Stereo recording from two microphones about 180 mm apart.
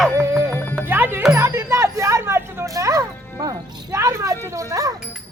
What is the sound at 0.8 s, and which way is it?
Music, 10° right (ahead or behind).